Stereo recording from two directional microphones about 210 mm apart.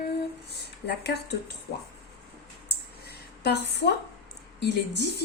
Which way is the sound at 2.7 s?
50° left (ahead or behind).